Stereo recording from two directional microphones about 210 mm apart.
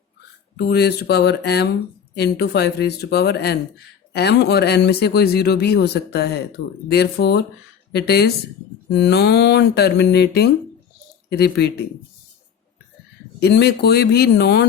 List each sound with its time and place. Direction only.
0.7 s speech: 50° left (ahead or behind)
13.4 s speech: 50° left (ahead or behind)